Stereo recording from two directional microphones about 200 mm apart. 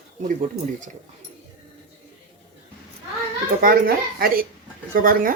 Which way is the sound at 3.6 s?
45° right (ahead or behind).